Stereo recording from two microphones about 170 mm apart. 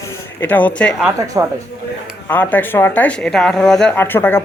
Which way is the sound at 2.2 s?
10° left (ahead or behind).